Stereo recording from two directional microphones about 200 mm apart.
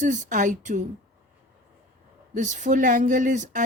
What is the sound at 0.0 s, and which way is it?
Speech, 40° right (ahead or behind).